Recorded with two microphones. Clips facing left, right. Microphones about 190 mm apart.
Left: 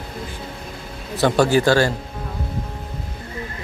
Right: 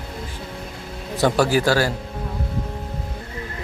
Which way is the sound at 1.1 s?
10° right (ahead or behind).